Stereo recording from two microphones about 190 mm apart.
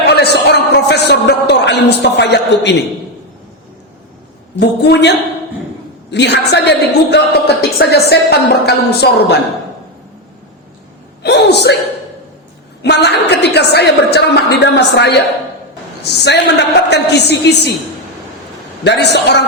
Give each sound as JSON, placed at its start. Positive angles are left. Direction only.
{"t": 0.1, "sound": "music", "side_deg": 60}
{"t": 4.8, "sound": "a woman's voice", "side_deg": 60}
{"t": 11.2, "sound": "a woman's voice", "side_deg": 60}
{"t": 12.8, "sound": "a woman's voice", "side_deg": 65}
{"t": 18.9, "sound": "a woman's voice", "side_deg": 60}